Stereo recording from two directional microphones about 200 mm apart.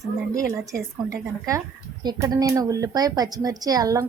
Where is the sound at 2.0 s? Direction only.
20° right (ahead or behind).